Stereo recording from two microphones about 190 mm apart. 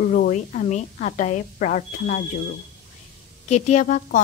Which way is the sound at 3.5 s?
35° left (ahead or behind).